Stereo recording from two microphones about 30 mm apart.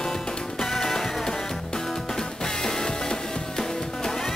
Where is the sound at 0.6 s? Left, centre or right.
Centre.